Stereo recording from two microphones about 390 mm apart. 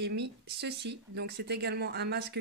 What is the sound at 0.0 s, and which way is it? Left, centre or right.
Speech, right.